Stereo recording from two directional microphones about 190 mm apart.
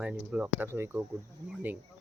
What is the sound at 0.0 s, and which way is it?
Speech, 5° right (ahead or behind).